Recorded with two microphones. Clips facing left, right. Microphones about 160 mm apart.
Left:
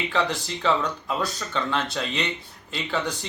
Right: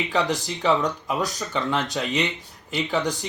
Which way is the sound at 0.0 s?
15° right (ahead or behind).